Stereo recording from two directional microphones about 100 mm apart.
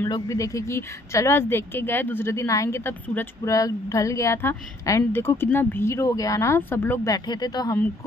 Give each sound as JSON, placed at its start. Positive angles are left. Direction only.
{"t": 0.1, "sound": "a woman's voice", "side_deg": 35}
{"t": 3.4, "sound": "a woman's voice", "side_deg": 35}
{"t": 7.1, "sound": "speech", "side_deg": 45}